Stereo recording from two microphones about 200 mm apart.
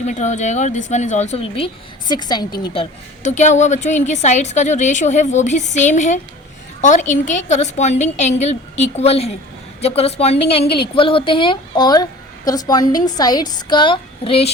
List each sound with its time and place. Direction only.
0.0 s a woman's voice: 35° left (ahead or behind)
3.2 s a woman's voice: 35° left (ahead or behind)